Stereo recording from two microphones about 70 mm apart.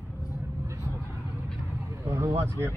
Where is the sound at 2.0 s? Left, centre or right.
Right.